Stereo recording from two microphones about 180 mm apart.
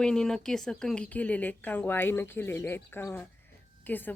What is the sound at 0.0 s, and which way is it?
Speech, 5° left (ahead or behind).